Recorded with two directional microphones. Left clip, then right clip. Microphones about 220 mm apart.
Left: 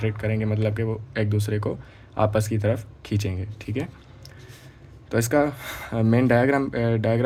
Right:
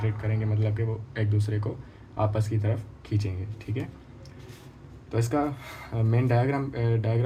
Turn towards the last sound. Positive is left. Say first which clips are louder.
# left 7 dB
turn(degrees=50)  # may be behind; listen again after turning